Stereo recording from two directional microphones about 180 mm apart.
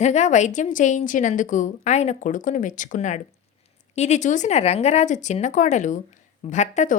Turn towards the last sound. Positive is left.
turn(degrees=45)  # may be behind; listen again after turning